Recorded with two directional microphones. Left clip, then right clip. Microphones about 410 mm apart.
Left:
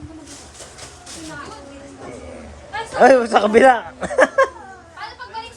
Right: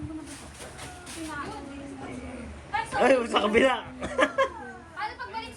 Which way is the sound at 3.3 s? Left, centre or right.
Left.